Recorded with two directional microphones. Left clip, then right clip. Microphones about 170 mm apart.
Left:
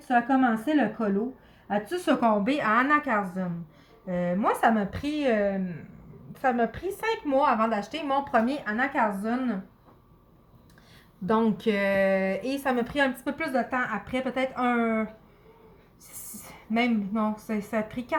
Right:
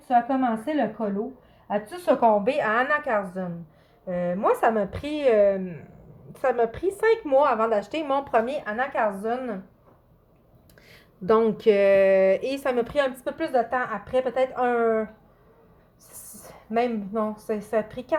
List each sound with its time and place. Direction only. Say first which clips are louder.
0.1 s a woman's voice: right 1 dB; 20° right (ahead or behind)
2.5 s speech: right 1 dB; 40° right (ahead or behind)
11.3 s speech: right 6 dB; 35° right (ahead or behind)
16.4 s speech: right 3 dB; 35° right (ahead or behind)